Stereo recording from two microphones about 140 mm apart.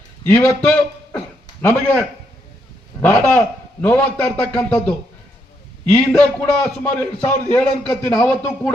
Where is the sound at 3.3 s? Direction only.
10° left (ahead or behind).